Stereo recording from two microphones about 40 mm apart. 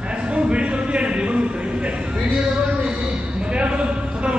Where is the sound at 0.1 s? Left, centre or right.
Right.